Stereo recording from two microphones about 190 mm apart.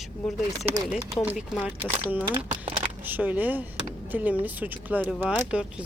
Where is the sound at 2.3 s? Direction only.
25° right (ahead or behind).